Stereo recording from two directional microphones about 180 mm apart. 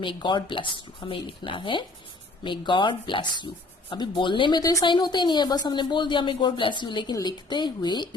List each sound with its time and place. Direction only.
0.0 s speech: 25° left (ahead or behind)